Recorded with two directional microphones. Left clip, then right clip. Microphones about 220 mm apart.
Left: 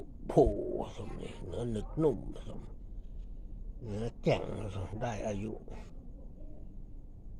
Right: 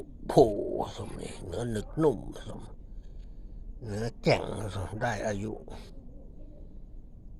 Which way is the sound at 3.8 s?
15° right (ahead or behind).